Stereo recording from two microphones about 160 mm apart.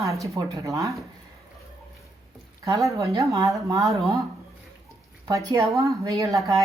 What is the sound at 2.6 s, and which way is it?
A woman's voice, 20° right (ahead or behind).